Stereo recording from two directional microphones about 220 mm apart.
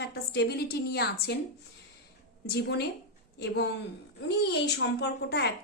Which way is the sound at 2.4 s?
50° left (ahead or behind).